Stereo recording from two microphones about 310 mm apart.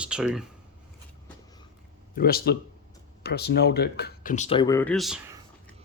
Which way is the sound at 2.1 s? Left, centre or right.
Left.